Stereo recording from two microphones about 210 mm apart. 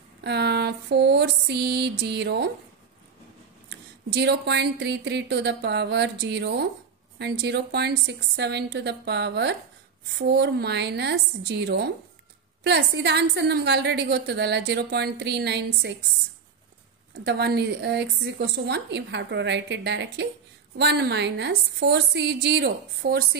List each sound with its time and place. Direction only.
0.2 s a woman's voice: 50° right (ahead or behind)
3.6 s a woman's voice: 50° right (ahead or behind)
17.1 s a woman's voice: 50° right (ahead or behind)